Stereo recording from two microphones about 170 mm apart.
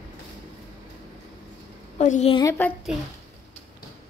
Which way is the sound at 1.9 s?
45° left (ahead or behind).